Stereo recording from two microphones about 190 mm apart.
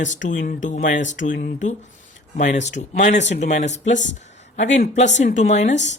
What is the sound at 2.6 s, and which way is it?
Speech, 35° left (ahead or behind).